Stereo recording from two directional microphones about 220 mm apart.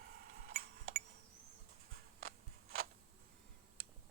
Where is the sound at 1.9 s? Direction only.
40° right (ahead or behind).